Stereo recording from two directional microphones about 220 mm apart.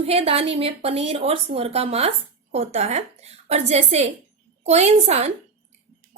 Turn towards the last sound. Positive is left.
turn(degrees=-30)  # may be behind; listen again after turning